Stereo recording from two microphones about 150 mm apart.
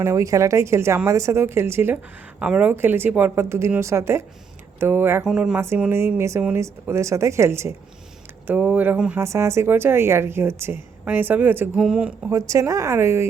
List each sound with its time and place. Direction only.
0.0 s a woman's voice: 20° right (ahead or behind)
12.3 s speech: 20° right (ahead or behind)